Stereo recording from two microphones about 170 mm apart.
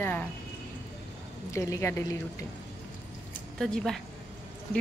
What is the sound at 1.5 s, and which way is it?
Speech, 15° left (ahead or behind).